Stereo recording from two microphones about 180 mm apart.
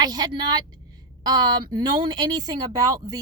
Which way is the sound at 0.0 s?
20° right (ahead or behind).